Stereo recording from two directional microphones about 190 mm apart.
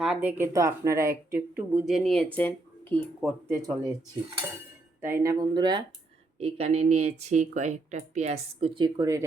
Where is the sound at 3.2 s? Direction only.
5° right (ahead or behind).